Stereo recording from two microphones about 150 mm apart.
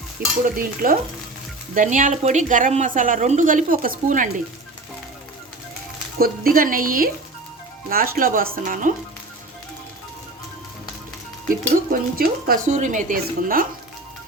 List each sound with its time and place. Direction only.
0.2 s a woman's voice: 75° right (ahead or behind)
6.1 s speech: 75° right (ahead or behind)
11.7 s a woman's voice: 75° right (ahead or behind)